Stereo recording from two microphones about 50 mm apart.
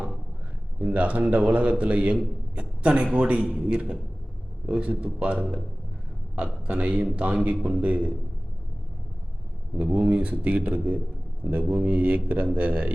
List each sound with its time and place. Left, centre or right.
0.8 s a man's voice: right
9.7 s a man's voice: right